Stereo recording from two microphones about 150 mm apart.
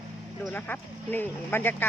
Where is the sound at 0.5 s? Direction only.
10° left (ahead or behind).